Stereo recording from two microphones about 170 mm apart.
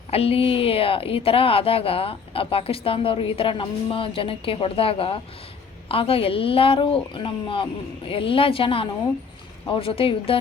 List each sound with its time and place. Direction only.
0.1 s a woman's voice: 35° left (ahead or behind)